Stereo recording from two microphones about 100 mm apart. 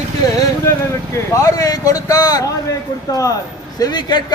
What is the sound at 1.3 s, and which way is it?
A man's voice, 35° left (ahead or behind).